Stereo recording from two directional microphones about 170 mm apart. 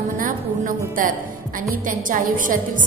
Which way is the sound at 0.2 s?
55° right (ahead or behind).